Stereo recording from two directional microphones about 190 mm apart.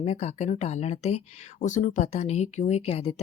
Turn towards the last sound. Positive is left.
turn(degrees=35)  # may be behind; listen again after turning